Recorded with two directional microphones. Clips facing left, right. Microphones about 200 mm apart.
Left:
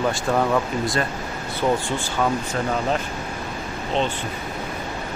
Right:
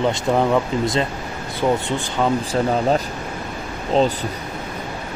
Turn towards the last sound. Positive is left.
turn(degrees=-40)  # may be behind; listen again after turning